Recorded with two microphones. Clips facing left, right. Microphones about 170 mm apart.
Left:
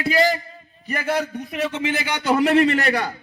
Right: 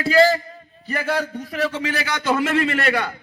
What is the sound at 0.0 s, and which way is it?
A man's voice, 15° left (ahead or behind).